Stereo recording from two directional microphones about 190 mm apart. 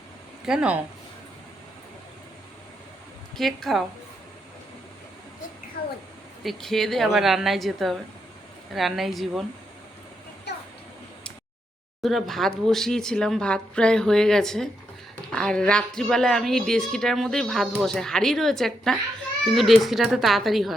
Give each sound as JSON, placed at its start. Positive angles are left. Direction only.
{"t": 0.4, "sound": "speech", "side_deg": -5}
{"t": 3.3, "sound": "speech", "side_deg": 0}
{"t": 5.8, "sound": "a sound", "side_deg": 55}
{"t": 6.4, "sound": "speech", "side_deg": 0}
{"t": 10.5, "sound": "a sound", "side_deg": 65}
{"t": 12.0, "sound": "speech", "side_deg": 0}